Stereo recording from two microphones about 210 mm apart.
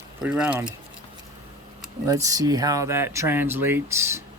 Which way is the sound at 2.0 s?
15° right (ahead or behind).